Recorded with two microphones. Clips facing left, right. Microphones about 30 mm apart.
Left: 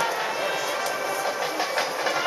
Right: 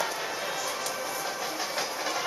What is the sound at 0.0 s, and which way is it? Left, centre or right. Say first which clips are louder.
Music: left 6 dB; left.